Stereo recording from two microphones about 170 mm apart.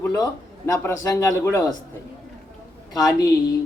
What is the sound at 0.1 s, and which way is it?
A man's voice, 20° left (ahead or behind).